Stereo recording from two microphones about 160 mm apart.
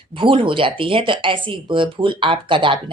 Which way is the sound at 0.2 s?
30° right (ahead or behind).